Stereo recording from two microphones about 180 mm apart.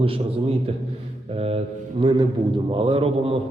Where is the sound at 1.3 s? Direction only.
35° right (ahead or behind).